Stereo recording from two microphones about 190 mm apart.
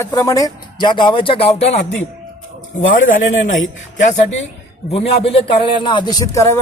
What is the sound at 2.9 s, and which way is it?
A man's voice, 45° left (ahead or behind).